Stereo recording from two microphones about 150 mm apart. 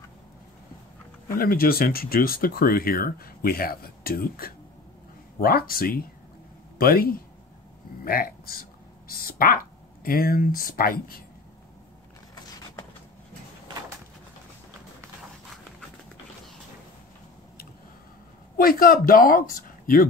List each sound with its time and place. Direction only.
1.3 s speech: 80° left
18.6 s speech: 70° left (ahead or behind)